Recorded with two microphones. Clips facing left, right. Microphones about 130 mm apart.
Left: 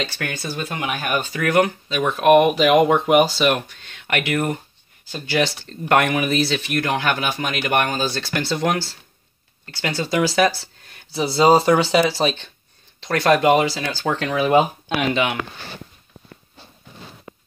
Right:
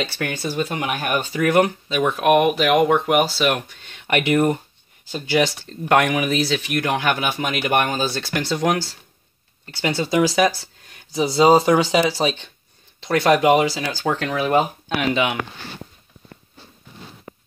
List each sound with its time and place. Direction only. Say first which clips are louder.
0.5 s speech: right 3 dB; 20° right (ahead or behind)
2.0 s speech: left 3 dB; 5° right (ahead or behind)
5.7 s speech: left 1 dB; 5° right (ahead or behind)
8.0 s speech: even; 5° right (ahead or behind)
9.8 s speech: right 2 dB; 5° right (ahead or behind)
11.3 s speech: even; 10° right (ahead or behind)